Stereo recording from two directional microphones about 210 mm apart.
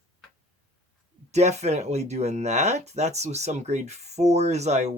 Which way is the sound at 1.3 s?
30° right (ahead or behind).